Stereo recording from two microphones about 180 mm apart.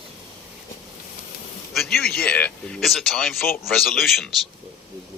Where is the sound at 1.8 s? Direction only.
Centre (ahead or behind).